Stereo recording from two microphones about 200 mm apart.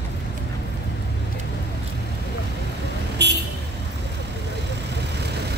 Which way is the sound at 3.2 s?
55° right (ahead or behind).